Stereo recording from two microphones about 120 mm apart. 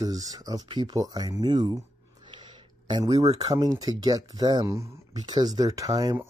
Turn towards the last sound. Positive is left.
turn(degrees=-30)  # may be behind; listen again after turning